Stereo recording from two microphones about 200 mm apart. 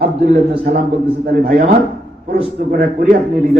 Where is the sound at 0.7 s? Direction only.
50° right (ahead or behind).